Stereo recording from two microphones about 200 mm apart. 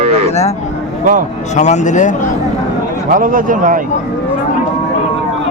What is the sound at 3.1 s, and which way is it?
Speech, 40° right (ahead or behind).